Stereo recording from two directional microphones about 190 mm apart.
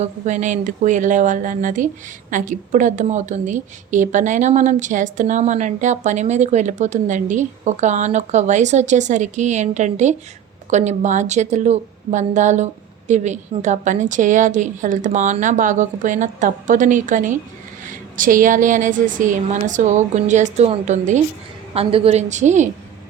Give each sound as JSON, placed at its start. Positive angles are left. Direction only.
{"t": 0.0, "sound": "a woman's voice", "side_deg": -40}